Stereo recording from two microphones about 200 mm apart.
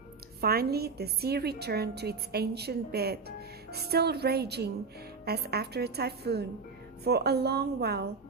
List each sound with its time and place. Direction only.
0.4 s a woman's voice: 50° right (ahead or behind)